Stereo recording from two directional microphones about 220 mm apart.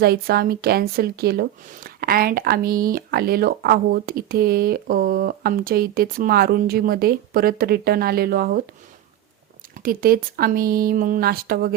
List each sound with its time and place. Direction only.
0.0 s speech: 45° right (ahead or behind)
9.7 s speech: 40° right (ahead or behind)